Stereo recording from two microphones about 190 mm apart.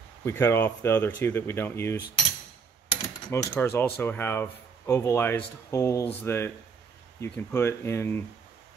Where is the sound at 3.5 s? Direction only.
10° left (ahead or behind).